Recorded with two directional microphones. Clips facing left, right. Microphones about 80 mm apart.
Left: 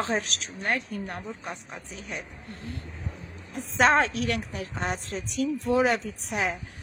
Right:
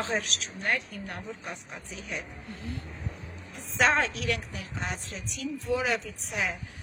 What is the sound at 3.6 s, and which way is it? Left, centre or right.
A woman's voice, left.